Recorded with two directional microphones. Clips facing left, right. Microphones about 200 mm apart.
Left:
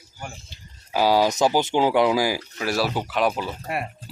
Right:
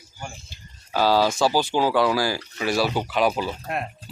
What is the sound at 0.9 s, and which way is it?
Speech, 15° left (ahead or behind).